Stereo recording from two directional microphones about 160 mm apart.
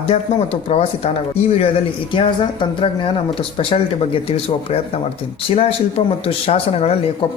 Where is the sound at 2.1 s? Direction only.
30° left (ahead or behind).